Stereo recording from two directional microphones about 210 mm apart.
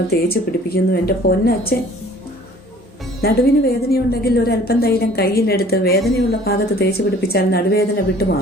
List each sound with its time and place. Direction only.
0.1 s a woman's voice: 45° left (ahead or behind)
3.2 s a woman's voice: 50° left (ahead or behind)